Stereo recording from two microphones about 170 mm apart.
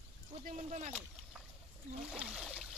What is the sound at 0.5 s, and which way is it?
Speech, 45° right (ahead or behind).